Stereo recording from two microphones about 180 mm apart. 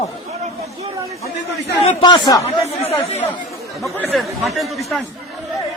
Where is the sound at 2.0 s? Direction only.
25° left (ahead or behind).